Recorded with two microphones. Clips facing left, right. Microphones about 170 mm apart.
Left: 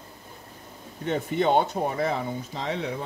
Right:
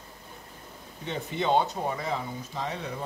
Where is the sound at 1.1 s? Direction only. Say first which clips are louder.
Left 4 dB; 50° left (ahead or behind); by 2.7 s 75° left (ahead or behind).